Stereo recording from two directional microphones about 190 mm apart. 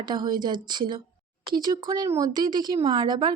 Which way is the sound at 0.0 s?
20° right (ahead or behind).